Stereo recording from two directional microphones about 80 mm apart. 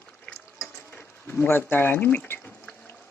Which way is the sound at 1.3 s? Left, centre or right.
Left.